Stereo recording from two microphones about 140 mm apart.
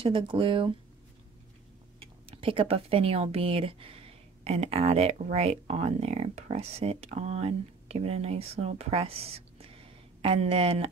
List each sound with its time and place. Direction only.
0.0 s speech: 40° right (ahead or behind)
2.3 s speech: 40° right (ahead or behind)